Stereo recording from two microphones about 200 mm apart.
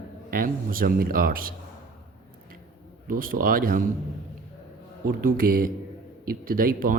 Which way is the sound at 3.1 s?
45° right (ahead or behind).